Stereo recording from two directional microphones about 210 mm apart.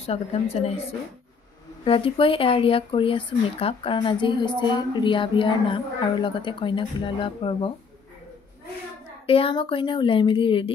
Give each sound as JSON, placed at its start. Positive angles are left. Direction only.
{"t": 0.0, "sound": "speech", "side_deg": 30}
{"t": 1.9, "sound": "speech", "side_deg": 25}
{"t": 9.2, "sound": "speech", "side_deg": 25}